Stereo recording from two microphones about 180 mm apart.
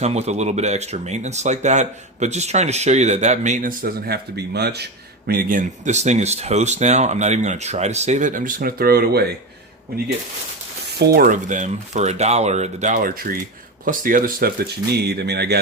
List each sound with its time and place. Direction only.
0.0 s speech: 35° right (ahead or behind); by 9.3 s 60° right (ahead or behind)
10.9 s speech: 60° right (ahead or behind)
14.9 s speech: 65° right (ahead or behind)